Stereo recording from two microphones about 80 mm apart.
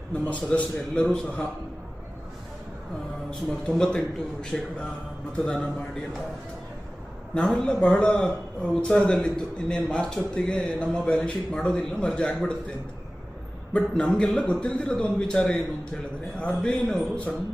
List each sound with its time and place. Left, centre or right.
0.1 s a man's voice: centre
3.8 s a man's voice: centre
7.3 s a man's voice: centre
13.7 s a man's voice: centre
16.7 s a man's voice: centre